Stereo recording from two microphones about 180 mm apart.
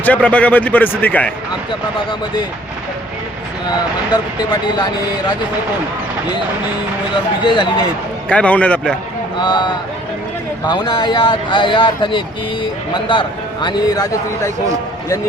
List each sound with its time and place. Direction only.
0.0 s a man's voice: 10° left (ahead or behind)
7.4 s a man's voice: 25° left (ahead or behind)
8.3 s a man's voice: 5° left (ahead or behind)
9.4 s a man's voice: 25° left (ahead or behind)